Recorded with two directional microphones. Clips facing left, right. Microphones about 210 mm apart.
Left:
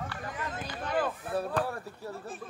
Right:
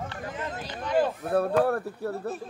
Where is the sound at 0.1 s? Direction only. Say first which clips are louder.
Right 3 dB; 25° right (ahead or behind).